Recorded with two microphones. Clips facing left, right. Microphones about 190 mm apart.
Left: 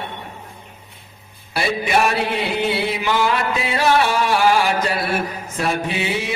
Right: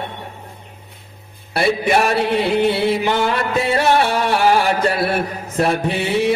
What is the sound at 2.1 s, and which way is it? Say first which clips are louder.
Mantra: right 5 dB; 60° right (ahead or behind).